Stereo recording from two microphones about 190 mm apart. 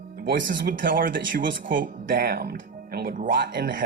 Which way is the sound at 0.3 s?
45° right (ahead or behind).